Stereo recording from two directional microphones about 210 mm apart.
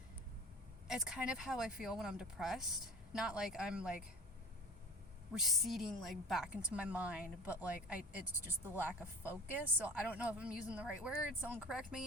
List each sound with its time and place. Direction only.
0.9 s a woman's voice: 5° right (ahead or behind)
5.3 s a woman's voice: centre (ahead or behind)